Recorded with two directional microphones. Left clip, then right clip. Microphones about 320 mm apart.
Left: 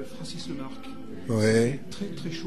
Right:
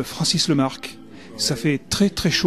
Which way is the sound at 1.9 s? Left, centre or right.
Right.